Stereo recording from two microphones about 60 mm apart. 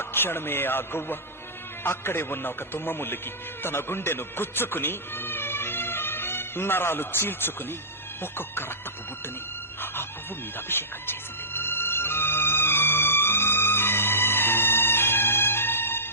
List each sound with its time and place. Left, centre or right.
0.0 s a man's voice: left
9.8 s speech: left
10.7 s music: left